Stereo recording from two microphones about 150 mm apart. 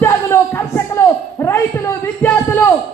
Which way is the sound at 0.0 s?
15° left (ahead or behind).